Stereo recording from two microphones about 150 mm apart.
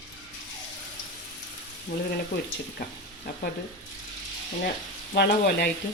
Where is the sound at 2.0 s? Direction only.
90° left.